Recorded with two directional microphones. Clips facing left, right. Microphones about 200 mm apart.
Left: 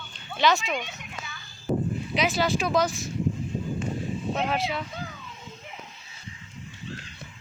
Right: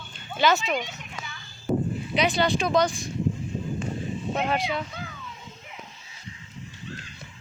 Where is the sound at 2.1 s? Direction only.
Centre (ahead or behind).